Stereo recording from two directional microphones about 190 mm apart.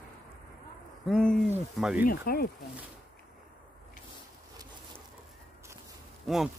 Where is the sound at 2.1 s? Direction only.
50° left (ahead or behind).